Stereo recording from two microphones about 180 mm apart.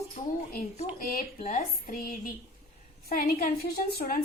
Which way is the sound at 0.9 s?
45° left (ahead or behind).